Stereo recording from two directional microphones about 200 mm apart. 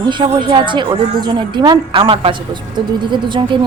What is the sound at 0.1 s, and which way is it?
Speech, 25° right (ahead or behind).